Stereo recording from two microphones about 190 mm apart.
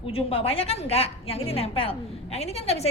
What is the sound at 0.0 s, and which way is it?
A woman's voice, 30° left (ahead or behind).